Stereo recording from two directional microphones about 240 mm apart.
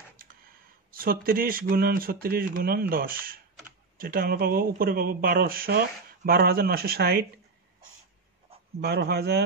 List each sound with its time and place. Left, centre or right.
0.9 s speech: right
8.8 s speech: right